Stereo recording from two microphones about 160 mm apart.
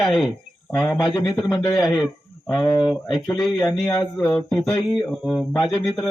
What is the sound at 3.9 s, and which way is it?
Speech, 25° left (ahead or behind).